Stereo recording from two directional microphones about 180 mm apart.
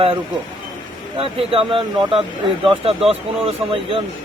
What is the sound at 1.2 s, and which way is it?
Speech, 30° right (ahead or behind).